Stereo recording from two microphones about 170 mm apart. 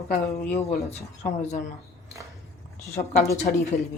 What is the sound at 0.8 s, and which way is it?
Speech, 40° left (ahead or behind).